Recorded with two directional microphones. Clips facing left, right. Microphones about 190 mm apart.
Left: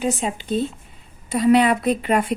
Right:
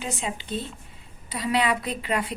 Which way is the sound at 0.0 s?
45° left (ahead or behind).